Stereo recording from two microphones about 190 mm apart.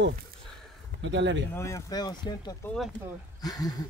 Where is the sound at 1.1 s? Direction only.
70° right (ahead or behind).